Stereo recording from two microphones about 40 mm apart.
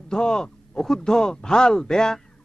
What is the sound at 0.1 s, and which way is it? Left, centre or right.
Speech, centre.